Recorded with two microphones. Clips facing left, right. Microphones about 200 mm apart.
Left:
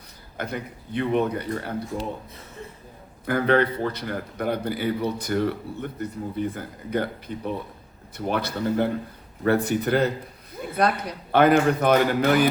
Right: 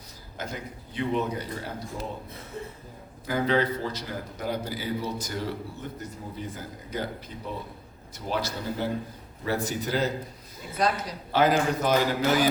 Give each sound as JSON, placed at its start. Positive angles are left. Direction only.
{"t": 0.3, "sound": "a man's voice", "side_deg": 60}
{"t": 3.2, "sound": "a man's voice", "side_deg": 60}